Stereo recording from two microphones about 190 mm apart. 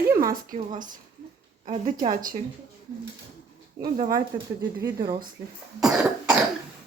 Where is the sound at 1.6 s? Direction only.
30° right (ahead or behind).